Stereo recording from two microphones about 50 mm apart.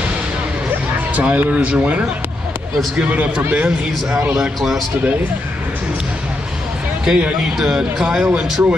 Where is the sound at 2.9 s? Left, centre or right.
Right.